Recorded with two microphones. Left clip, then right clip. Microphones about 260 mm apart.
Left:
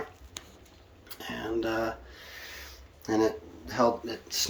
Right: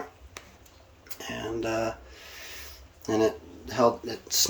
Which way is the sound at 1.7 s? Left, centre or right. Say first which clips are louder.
Right 3 dB; right.